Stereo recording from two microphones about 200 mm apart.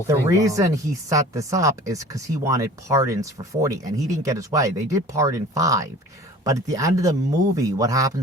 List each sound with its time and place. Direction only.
0.1 s speech: 15° right (ahead or behind)